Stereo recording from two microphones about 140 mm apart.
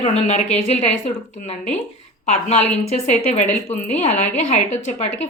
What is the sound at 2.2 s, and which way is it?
A woman's voice, 55° left (ahead or behind).